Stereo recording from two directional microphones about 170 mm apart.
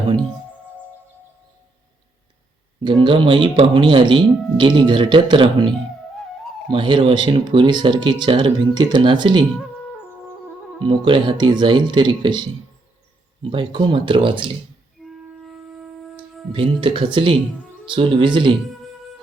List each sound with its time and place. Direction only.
2.8 s speech: 30° right (ahead or behind)
10.8 s speech: 30° right (ahead or behind)
15.0 s wind instrument: centre (ahead or behind)
16.5 s speech: 30° right (ahead or behind)